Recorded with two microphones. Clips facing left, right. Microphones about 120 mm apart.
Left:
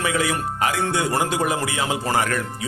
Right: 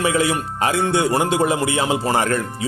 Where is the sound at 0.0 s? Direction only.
25° right (ahead or behind).